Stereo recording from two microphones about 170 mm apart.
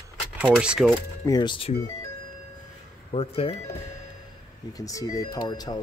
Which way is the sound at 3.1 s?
35° left (ahead or behind).